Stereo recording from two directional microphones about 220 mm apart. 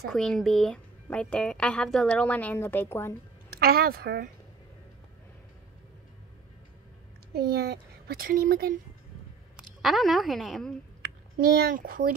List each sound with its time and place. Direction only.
0.1 s a woman's voice: centre (ahead or behind)
3.4 s a woman's voice: 45° right (ahead or behind)
7.3 s a child's voice: 45° right (ahead or behind)
9.6 s a woman's voice: centre (ahead or behind)
11.0 s a child's voice: 45° right (ahead or behind)